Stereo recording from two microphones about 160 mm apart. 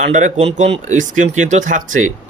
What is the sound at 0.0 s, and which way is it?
Speech, 50° right (ahead or behind).